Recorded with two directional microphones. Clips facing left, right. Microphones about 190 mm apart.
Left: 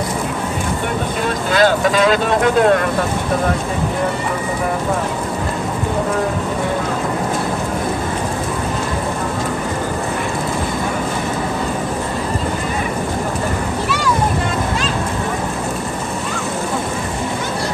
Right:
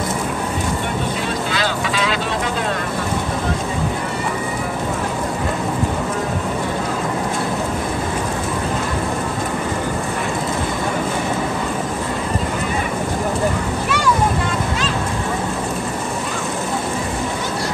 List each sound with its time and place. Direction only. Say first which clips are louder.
1.5 s speech: left 7 dB; 50° left (ahead or behind)